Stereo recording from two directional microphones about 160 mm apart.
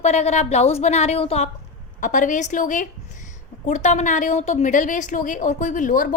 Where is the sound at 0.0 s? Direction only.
45° left (ahead or behind).